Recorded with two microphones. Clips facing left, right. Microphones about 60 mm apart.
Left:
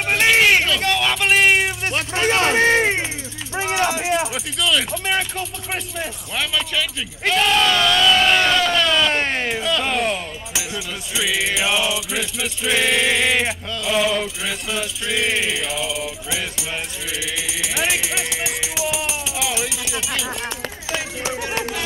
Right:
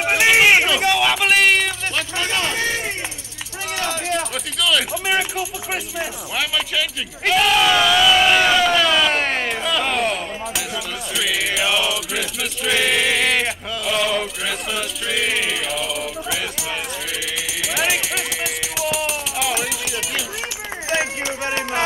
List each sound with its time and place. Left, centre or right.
0.0 s vehicle: centre
1.9 s a sound: left
3.5 s speech: left; by 20.2 s centre